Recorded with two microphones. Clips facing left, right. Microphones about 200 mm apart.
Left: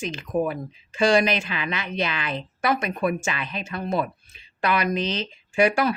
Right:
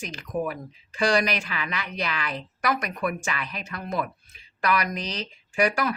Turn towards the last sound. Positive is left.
turn(degrees=25)  # may be behind; listen again after turning